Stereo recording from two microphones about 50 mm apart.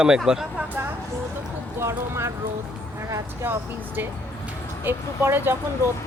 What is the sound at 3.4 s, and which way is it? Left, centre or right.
Speech, right.